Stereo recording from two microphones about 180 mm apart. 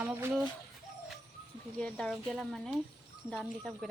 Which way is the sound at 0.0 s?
15° right (ahead or behind).